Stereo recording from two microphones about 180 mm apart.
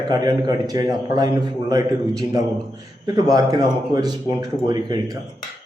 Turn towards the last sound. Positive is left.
turn(degrees=-25)  # may be behind; listen again after turning